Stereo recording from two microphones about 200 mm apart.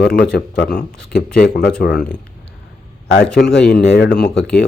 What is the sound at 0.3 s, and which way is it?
Speech, 60° left (ahead or behind).